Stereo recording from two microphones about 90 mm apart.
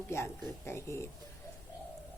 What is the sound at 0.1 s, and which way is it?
Speech, 30° left (ahead or behind).